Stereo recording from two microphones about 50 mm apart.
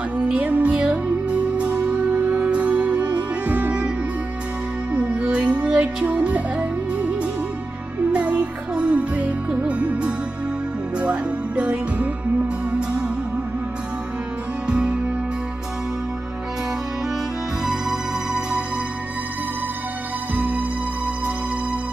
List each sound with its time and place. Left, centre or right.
0.3 s music: right
4.9 s music: right
8.1 s music: right
14.7 s music: centre
17.6 s music: centre